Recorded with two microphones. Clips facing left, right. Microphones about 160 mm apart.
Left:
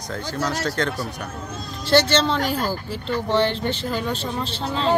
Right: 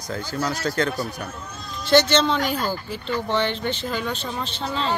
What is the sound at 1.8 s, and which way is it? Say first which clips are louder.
Speech: even; 30° left (ahead or behind).